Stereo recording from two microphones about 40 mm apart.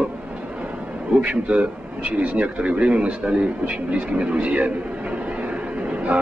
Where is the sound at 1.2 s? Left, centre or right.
Right.